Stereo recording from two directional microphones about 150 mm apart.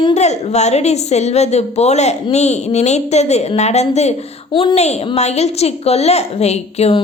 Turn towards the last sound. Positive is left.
turn(degrees=45)  # may be behind; listen again after turning